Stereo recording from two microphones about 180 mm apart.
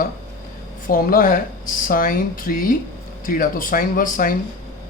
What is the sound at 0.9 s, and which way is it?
Speech, 50° left (ahead or behind).